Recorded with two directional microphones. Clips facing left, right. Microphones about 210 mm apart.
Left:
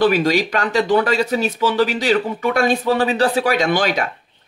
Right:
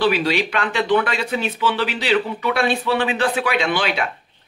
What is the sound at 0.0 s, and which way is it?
Speech, 45° left (ahead or behind).